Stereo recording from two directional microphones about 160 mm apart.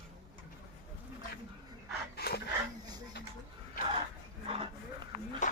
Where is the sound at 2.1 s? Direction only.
80° left.